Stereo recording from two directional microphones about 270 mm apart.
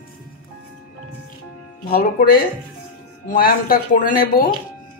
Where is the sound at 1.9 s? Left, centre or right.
Left.